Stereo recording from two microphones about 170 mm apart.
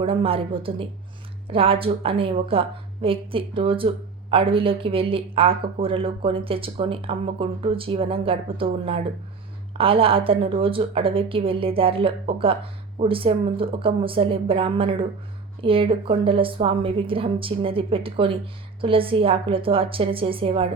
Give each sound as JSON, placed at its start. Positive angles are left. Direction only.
{"t": 0.0, "sound": "speech", "side_deg": -30}